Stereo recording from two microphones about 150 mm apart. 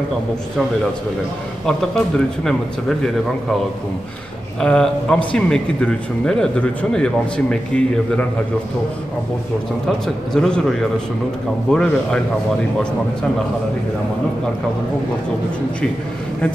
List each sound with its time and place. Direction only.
1.7 s a man's voice: 5° left (ahead or behind)
4.6 s a man's voice: 5° left (ahead or behind)
9.8 s a man's voice: 5° left (ahead or behind)
11.7 s a man's voice: 5° left (ahead or behind)